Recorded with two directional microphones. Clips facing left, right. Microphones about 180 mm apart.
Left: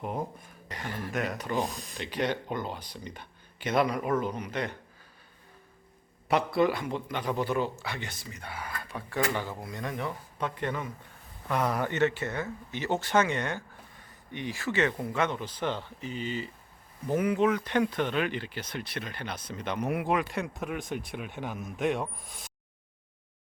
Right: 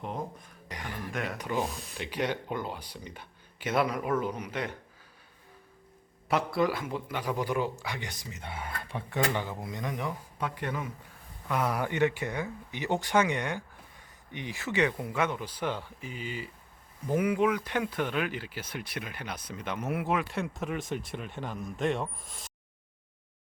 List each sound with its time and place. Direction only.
0.0 s speech: 5° left (ahead or behind)
0.7 s speech: 15° right (ahead or behind)
1.1 s speech: centre (ahead or behind)
6.2 s speech: centre (ahead or behind)